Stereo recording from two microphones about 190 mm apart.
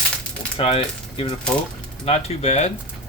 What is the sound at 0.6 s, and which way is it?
Speech, 30° left (ahead or behind).